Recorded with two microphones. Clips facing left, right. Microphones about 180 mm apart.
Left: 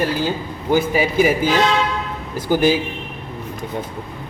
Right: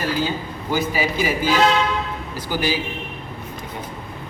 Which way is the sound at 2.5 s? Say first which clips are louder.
Left 8 dB; 50° left (ahead or behind).